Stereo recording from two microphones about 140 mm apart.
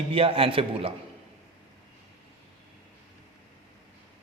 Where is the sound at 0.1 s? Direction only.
40° right (ahead or behind).